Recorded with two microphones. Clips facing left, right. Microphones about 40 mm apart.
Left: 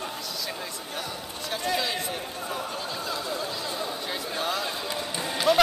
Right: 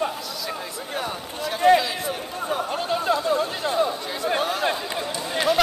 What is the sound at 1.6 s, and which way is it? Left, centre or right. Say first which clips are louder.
Speech: right 13 dB; centre.